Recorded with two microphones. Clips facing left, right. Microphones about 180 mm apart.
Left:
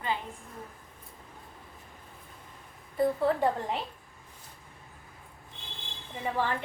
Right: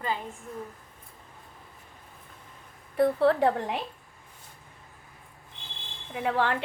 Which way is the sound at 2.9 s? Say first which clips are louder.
Right 4 dB; 75° right (ahead or behind).